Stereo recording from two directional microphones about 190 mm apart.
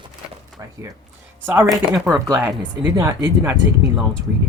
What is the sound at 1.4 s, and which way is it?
Speech, 10° right (ahead or behind).